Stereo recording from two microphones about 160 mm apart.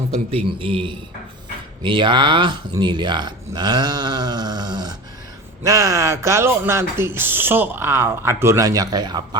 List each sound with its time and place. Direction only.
0.1 s a man's voice: 35° right (ahead or behind)